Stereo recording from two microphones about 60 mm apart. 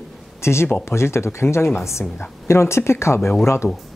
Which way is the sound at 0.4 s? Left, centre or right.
Left.